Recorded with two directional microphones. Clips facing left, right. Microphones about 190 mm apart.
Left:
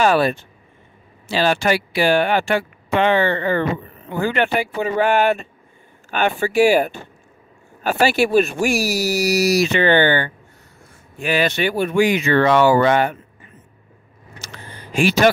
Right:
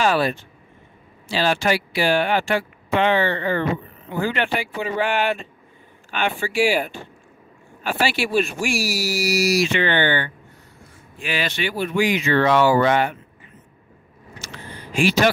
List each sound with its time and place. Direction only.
0.0 s speech: 50° left (ahead or behind)
15.0 s speech: 45° left (ahead or behind)